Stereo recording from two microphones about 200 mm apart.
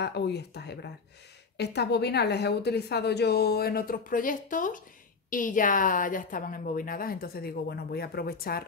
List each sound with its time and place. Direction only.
0.0 s a woman's voice: 55° left (ahead or behind)